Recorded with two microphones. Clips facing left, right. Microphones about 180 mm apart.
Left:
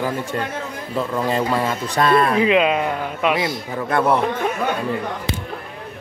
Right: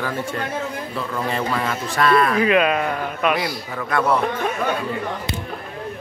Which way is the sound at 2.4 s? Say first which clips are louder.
Left 1 dB; 20° left (ahead or behind).